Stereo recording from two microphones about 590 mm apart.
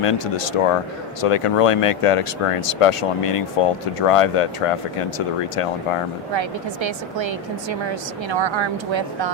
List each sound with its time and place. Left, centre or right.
0.0 s speech: left
6.3 s a woman's voice: right